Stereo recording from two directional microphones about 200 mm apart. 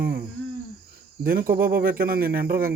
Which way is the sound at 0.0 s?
50° right (ahead or behind).